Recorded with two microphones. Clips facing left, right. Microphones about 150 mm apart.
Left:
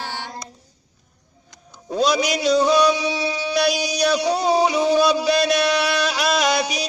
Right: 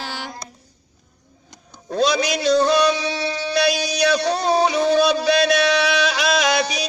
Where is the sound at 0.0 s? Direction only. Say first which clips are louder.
Even; 90° right.